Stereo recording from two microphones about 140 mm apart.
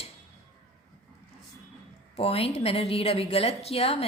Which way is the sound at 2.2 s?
45° left (ahead or behind).